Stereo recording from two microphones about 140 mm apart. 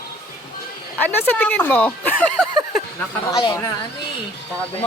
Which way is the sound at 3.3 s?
35° left (ahead or behind).